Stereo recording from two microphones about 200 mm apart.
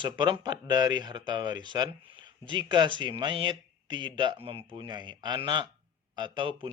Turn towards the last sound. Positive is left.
turn(degrees=-25)  # may be behind; listen again after turning